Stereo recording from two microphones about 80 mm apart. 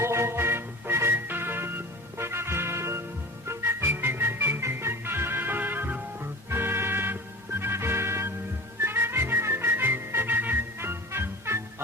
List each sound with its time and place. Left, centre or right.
0.0 s music: right